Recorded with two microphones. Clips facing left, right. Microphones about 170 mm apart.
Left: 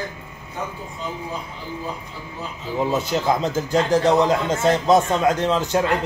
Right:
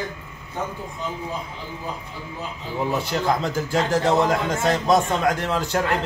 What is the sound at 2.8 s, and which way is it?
A man's voice, 20° left (ahead or behind).